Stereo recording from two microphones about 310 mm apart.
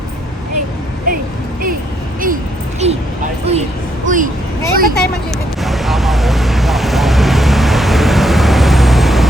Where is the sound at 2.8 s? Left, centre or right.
Right.